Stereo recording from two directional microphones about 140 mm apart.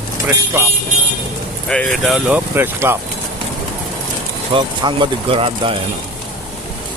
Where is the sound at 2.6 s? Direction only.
15° right (ahead or behind).